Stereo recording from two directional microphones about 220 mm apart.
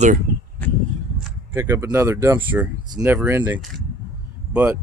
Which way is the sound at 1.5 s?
10° right (ahead or behind).